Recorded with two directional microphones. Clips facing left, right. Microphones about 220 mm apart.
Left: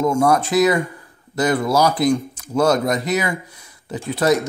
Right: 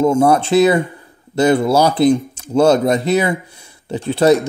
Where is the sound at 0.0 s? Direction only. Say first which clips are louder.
Right 4 dB; 30° right (ahead or behind).